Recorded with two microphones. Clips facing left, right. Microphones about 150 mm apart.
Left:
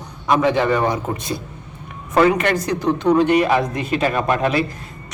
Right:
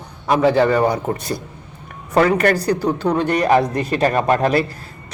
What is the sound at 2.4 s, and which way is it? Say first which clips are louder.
A woman's voice: right 3 dB; 35° right (ahead or behind).